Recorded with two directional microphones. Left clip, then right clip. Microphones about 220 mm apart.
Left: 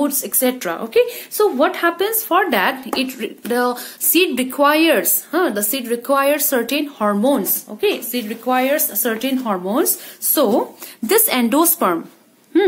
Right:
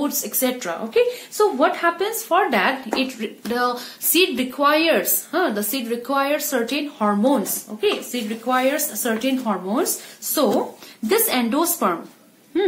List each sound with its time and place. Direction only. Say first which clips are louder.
0.0 s a woman's voice: left 4 dB; 45° left (ahead or behind)